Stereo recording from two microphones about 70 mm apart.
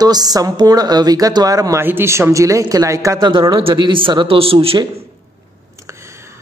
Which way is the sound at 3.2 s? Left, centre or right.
Right.